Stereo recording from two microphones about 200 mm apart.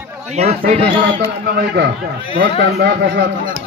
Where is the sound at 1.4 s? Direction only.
55° right (ahead or behind).